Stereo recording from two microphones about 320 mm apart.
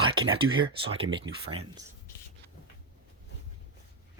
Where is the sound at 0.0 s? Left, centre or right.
Centre.